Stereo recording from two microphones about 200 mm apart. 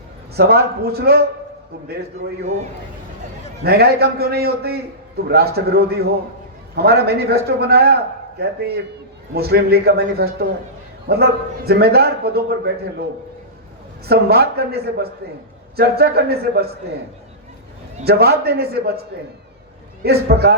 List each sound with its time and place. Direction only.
0.3 s a man's voice: 50° right (ahead or behind)
3.6 s a man's voice: 50° right (ahead or behind)
14.1 s a man's voice: 50° right (ahead or behind)
18.0 s a man's voice: 50° right (ahead or behind)
20.0 s a man's voice: 50° right (ahead or behind)